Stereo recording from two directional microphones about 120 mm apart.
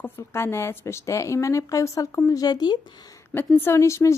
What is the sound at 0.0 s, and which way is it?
A woman's voice, 20° left (ahead or behind).